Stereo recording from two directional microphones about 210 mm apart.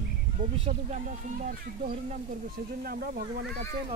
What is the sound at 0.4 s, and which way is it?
Speech, 35° right (ahead or behind).